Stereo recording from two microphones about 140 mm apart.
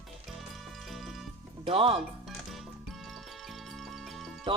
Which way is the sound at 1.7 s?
40° right (ahead or behind).